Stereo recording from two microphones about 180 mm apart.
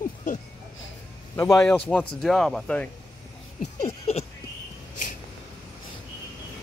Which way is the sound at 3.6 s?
40° left (ahead or behind).